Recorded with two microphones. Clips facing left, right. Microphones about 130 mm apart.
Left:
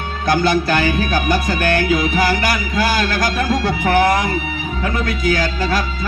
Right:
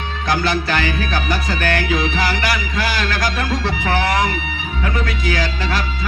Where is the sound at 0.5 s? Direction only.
45° left (ahead or behind).